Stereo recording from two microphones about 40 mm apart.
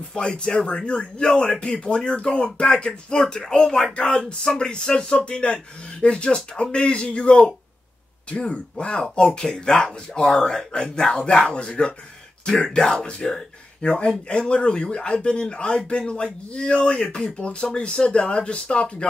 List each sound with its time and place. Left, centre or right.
0.1 s a man's voice: left
17.4 s a man's voice: left